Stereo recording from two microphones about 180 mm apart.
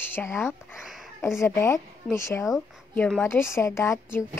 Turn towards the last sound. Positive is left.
turn(degrees=15)  # may be behind; listen again after turning